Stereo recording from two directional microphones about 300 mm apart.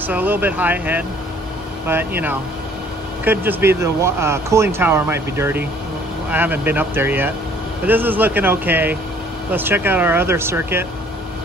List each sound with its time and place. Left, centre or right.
0.0 s speech: centre